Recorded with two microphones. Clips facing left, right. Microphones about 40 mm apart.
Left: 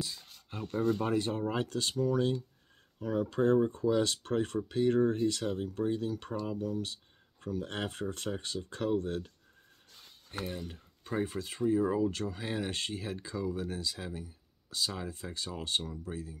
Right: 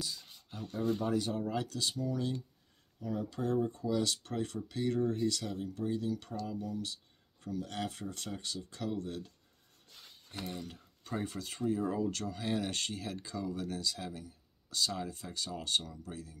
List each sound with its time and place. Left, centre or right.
0.0 s a sound: left
0.6 s speech: left
10.4 s speech: left